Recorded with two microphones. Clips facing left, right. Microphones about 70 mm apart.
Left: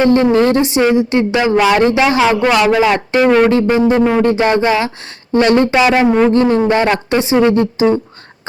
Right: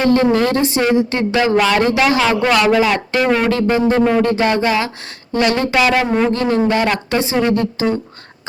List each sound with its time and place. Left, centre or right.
0.0 s a woman's voice: left
5.7 s a woman's voice: centre